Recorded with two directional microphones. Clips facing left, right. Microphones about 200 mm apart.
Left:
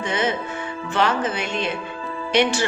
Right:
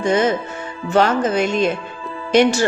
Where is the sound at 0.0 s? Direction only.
45° right (ahead or behind).